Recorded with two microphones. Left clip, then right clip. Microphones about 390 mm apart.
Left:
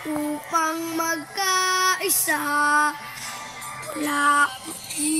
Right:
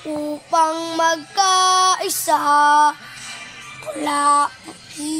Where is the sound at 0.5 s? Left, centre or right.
Centre.